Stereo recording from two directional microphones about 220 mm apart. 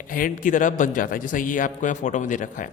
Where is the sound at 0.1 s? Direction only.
40° left (ahead or behind).